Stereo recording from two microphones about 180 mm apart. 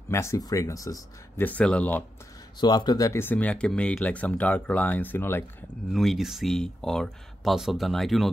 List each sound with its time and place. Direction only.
0.1 s speech: 15° left (ahead or behind)
2.6 s speech: 25° left (ahead or behind)
5.9 s speech: centre (ahead or behind)